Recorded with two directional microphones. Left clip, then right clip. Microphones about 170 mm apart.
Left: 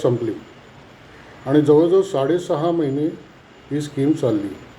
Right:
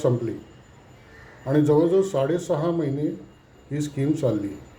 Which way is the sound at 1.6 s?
25° right (ahead or behind).